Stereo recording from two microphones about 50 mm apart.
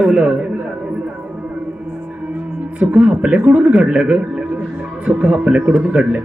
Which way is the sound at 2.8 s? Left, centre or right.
Right.